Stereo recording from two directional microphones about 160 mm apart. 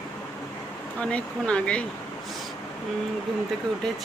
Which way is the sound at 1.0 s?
5° left (ahead or behind).